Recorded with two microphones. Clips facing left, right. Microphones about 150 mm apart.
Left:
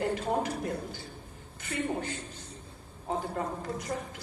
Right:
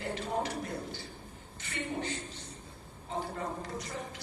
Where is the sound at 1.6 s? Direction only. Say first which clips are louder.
Left 4 dB; 50° left (ahead or behind).